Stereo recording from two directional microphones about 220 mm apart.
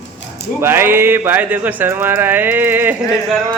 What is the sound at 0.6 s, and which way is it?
Speech, 10° right (ahead or behind).